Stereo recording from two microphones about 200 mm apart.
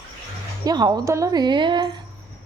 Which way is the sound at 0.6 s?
20° right (ahead or behind).